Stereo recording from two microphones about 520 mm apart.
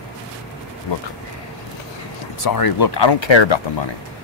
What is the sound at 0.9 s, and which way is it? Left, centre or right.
Speech, left.